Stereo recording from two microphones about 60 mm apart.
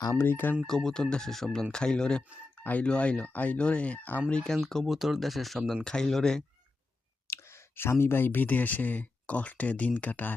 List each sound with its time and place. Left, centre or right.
0.2 s speech: left
0.7 s speech: centre; by 4.2 s left
4.3 s speech: centre
4.9 s speech: centre
7.3 s speech: left